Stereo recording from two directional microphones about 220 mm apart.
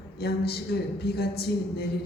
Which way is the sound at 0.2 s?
45° left (ahead or behind).